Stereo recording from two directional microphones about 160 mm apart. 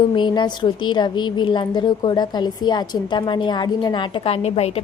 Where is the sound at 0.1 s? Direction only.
30° left (ahead or behind).